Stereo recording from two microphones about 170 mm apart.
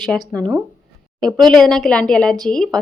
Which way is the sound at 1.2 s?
5° left (ahead or behind).